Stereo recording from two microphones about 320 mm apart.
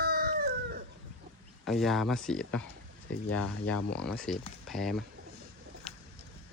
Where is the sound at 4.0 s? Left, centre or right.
Centre.